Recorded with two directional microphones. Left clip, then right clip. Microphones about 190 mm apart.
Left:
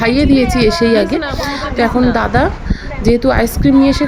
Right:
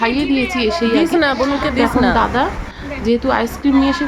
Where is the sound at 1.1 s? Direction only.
35° right (ahead or behind).